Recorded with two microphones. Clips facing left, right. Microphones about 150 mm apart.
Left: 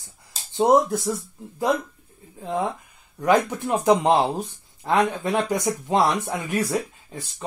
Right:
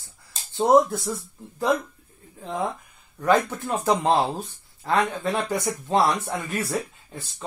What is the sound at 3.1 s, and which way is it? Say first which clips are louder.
Speech: left 1 dB; 15° left (ahead or behind).